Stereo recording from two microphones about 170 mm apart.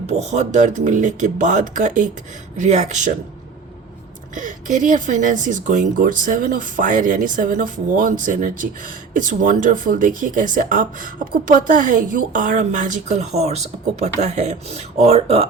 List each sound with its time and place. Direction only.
0.1 s speech: 40° right (ahead or behind)
4.4 s speech: 50° right (ahead or behind)